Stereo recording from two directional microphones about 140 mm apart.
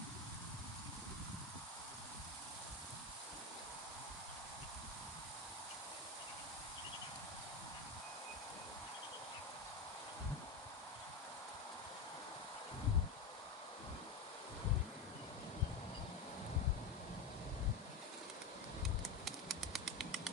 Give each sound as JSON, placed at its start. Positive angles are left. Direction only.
{"t": 19.0, "sound": "bird flight", "side_deg": 0}